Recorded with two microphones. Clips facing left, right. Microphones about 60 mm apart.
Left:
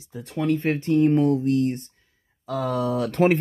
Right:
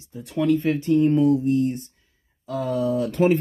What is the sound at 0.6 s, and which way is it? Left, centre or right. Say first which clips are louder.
Speech: right 1 dB; left.